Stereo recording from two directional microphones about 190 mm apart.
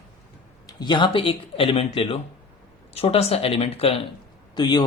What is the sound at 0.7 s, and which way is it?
A man's voice, 25° left (ahead or behind).